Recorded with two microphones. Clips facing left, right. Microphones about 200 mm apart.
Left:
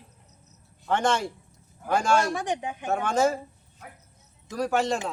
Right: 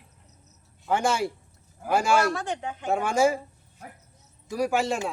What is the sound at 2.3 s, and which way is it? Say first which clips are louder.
Speech: left 2 dB; 15° left (ahead or behind).